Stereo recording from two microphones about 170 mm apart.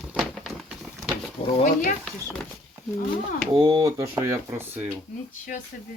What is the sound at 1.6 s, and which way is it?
Speech, 50° left (ahead or behind).